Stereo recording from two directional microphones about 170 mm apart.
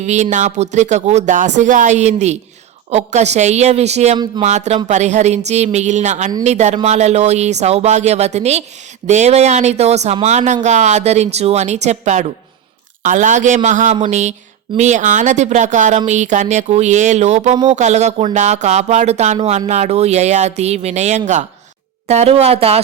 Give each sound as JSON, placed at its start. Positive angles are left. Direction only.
{"t": 0.0, "sound": "speech", "side_deg": -45}